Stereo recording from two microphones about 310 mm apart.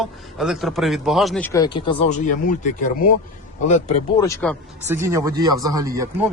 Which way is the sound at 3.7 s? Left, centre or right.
Left.